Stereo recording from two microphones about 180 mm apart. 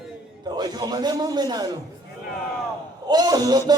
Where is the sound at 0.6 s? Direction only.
20° right (ahead or behind).